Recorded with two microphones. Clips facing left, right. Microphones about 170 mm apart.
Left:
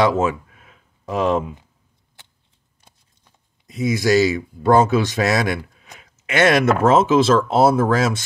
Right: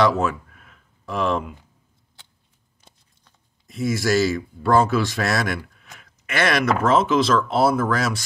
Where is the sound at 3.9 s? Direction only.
15° left (ahead or behind).